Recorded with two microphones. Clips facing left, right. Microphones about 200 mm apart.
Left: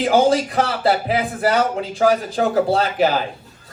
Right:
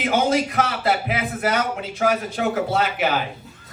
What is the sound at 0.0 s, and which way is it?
Speech, 30° left (ahead or behind).